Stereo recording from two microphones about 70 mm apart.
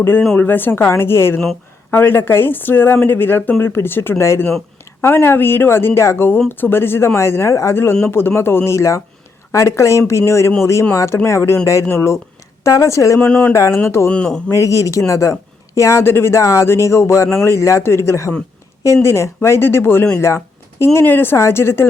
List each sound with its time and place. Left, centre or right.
0.3 s speech: left
13.1 s speech: centre
13.5 s speech: left
14.3 s speech: centre
14.5 s speech: left